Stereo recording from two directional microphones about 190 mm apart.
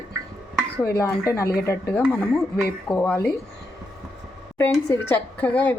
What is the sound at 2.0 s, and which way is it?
Speech, 5° right (ahead or behind).